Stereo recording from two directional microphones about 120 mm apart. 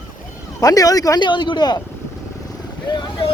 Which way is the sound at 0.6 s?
30° left (ahead or behind).